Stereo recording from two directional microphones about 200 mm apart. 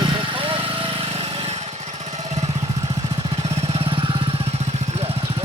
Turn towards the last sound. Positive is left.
turn(degrees=-30)  # may be behind; listen again after turning